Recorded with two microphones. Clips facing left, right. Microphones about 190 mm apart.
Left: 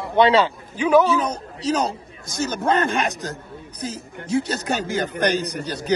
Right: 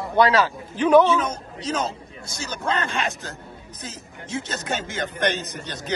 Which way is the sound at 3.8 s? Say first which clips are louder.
Left 8 dB; 35° left (ahead or behind).